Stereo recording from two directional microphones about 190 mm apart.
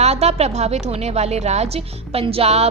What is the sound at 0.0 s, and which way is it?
A woman's voice, 35° right (ahead or behind).